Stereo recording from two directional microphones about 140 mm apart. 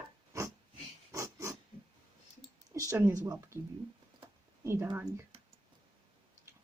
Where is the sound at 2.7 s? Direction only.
20° right (ahead or behind).